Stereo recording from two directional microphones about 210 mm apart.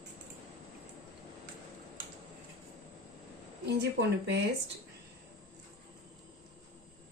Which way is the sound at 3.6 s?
55° right (ahead or behind).